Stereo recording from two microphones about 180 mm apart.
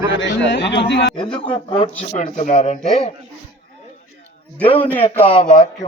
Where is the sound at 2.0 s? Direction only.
40° left (ahead or behind).